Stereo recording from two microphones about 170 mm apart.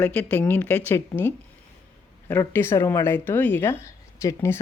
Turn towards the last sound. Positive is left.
turn(degrees=15)  # may be behind; listen again after turning